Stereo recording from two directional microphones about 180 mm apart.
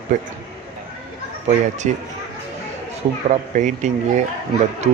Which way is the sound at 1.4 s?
40° right (ahead or behind).